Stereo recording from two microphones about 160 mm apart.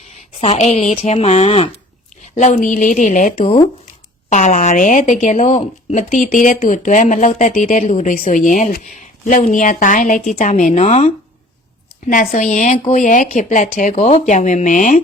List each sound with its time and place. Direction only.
0.3 s speech: 45° left (ahead or behind)
2.3 s speech: 50° left (ahead or behind)
12.0 s speech: 55° left (ahead or behind)